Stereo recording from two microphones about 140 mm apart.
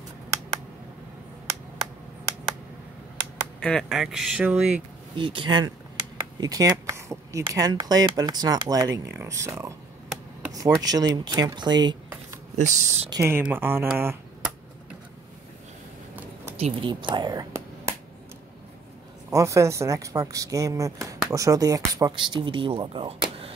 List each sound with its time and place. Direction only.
3.5 s speech: 5° left (ahead or behind)
5.1 s speech: 35° right (ahead or behind)
12.6 s speech: 55° right (ahead or behind)
13.1 s speech: 20° right (ahead or behind)
16.5 s speech: 40° right (ahead or behind); by 17.9 s 25° right (ahead or behind)
19.3 s speech: 20° right (ahead or behind); by 23.5 s 45° right (ahead or behind)